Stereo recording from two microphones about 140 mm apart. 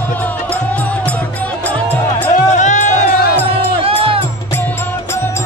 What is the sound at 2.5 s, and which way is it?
Music, 60° left (ahead or behind).